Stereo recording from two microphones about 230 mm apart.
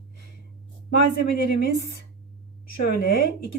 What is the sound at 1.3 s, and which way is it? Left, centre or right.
A woman's voice, left.